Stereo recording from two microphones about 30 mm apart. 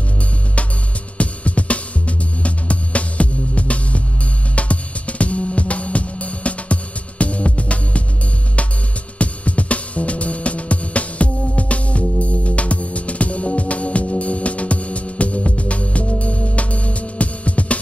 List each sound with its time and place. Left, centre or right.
1.1 s music: left
9.2 s music: left